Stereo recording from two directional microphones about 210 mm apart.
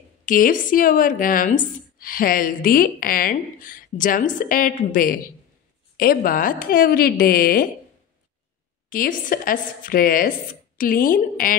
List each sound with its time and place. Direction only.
0.2 s a woman's voice: 40° left (ahead or behind)
8.8 s a woman's voice: 40° left (ahead or behind)